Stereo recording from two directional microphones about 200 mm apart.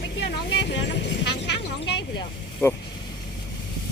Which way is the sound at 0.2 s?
60° left (ahead or behind).